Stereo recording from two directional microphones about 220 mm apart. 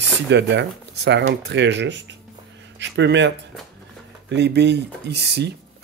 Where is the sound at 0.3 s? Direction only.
50° right (ahead or behind).